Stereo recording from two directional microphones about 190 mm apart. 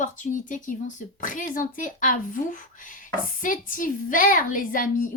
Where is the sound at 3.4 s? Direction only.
45° left (ahead or behind).